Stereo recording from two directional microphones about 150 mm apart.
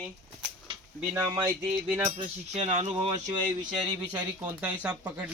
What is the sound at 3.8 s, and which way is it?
Speech, 30° right (ahead or behind).